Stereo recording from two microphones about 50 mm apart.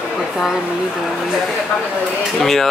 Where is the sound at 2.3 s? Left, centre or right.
Centre.